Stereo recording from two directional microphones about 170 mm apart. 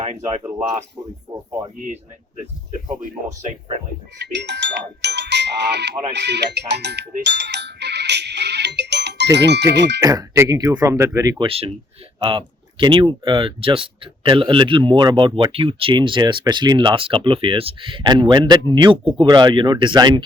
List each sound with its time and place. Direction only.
0.0 s speech: 40° right (ahead or behind)
1.5 s speech: 20° right (ahead or behind)
1.8 s speech: 45° right (ahead or behind)
4.2 s speech: 85° right
6.1 s sheep: 80° right
10.0 s speech: 20° right (ahead or behind)
11.4 s speech: 35° right (ahead or behind)